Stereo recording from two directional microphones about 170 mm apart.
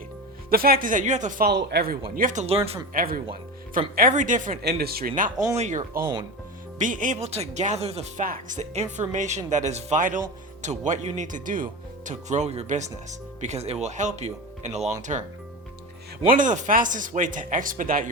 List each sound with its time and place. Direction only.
0.5 s speech: 60° right (ahead or behind)
1.5 s speech: 75° right (ahead or behind)
2.1 s speech: 50° right (ahead or behind)
2.9 s speech: 60° right (ahead or behind)
4.6 s speech: 70° right (ahead or behind); by 5.3 s 55° right (ahead or behind)
5.5 s speech: 45° right (ahead or behind)
16.3 s speech: 50° right (ahead or behind)